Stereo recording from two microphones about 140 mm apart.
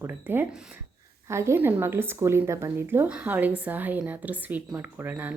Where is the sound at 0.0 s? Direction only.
15° right (ahead or behind).